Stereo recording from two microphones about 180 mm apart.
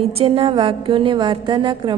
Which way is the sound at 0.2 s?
30° right (ahead or behind).